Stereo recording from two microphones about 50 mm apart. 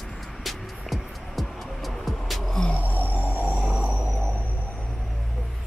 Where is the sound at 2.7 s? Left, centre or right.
Left.